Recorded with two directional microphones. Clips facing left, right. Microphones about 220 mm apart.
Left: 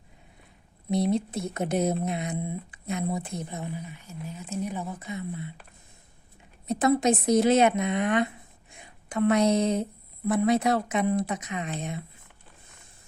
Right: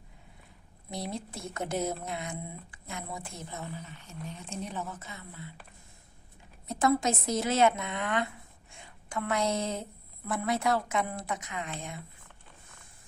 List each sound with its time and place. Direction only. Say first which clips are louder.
1.1 s a woman's voice: left 10 dB; 20° left (ahead or behind)
6.7 s a woman's voice: left 5 dB; 20° left (ahead or behind)